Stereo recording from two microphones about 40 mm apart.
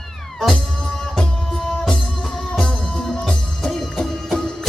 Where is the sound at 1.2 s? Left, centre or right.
Left.